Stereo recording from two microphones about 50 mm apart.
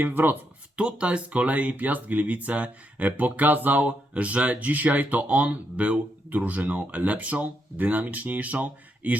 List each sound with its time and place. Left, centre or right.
0.0 s speech: right
0.8 s speech: right